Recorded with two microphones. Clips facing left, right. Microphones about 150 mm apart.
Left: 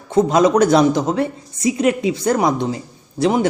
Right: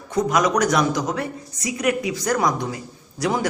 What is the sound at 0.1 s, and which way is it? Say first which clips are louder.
A man's voice: left 6 dB; 25° left (ahead or behind).